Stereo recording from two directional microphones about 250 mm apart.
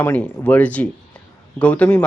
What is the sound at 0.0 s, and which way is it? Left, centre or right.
Speech, centre.